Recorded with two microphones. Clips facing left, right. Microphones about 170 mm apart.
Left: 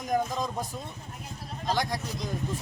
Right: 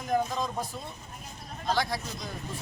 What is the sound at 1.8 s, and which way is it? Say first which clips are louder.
Speech: even; 15° left (ahead or behind).